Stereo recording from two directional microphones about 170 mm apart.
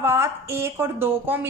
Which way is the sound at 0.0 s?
15° right (ahead or behind).